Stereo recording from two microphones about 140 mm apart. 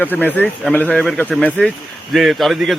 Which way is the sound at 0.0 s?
15° left (ahead or behind).